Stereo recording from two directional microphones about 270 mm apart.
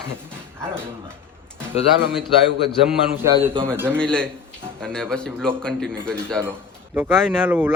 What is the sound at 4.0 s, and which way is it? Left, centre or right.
A man's voice, centre.